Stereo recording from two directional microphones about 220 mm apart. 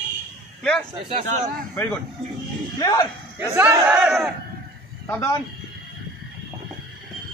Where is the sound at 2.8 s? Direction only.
15° left (ahead or behind).